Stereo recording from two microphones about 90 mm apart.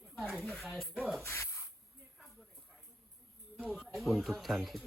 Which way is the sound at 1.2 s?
30° left (ahead or behind).